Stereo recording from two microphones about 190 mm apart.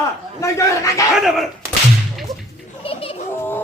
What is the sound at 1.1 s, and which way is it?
Speech, centre (ahead or behind).